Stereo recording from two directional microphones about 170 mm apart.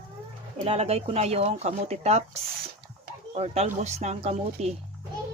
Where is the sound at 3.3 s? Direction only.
40° right (ahead or behind).